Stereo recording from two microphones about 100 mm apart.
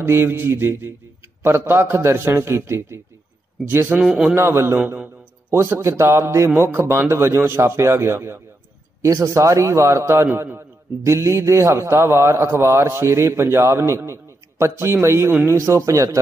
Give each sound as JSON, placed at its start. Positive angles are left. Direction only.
{"t": 0.0, "sound": "a man's voice", "side_deg": -25}
{"t": 4.0, "sound": "a man's voice", "side_deg": -10}
{"t": 4.4, "sound": "a man's voice", "side_deg": -25}
{"t": 5.5, "sound": "a man's voice", "side_deg": -30}